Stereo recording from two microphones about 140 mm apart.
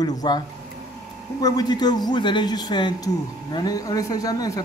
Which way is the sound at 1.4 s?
30° left (ahead or behind).